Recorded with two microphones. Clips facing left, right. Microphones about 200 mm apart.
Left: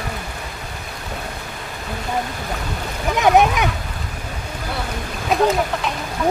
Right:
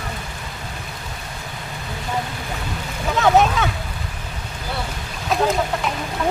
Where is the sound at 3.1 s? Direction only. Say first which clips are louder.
Left 1 dB; 15° left (ahead or behind).